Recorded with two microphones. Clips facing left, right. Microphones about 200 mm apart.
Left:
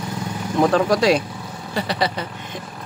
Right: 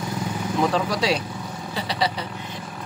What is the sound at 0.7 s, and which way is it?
Speech, 50° left (ahead or behind).